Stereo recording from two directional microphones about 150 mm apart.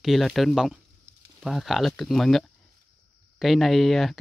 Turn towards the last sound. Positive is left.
turn(degrees=0)  # may be behind; listen again after turning